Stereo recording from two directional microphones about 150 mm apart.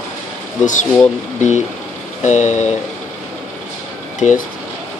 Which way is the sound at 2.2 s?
50° left (ahead or behind).